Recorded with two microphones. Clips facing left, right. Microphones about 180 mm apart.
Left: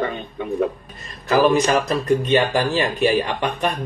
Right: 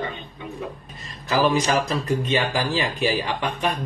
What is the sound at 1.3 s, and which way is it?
Speech, 55° left (ahead or behind).